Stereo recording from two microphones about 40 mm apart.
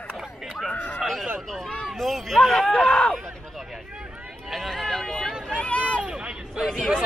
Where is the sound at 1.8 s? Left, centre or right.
Centre.